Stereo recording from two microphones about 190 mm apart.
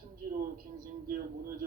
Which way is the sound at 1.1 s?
50° right (ahead or behind).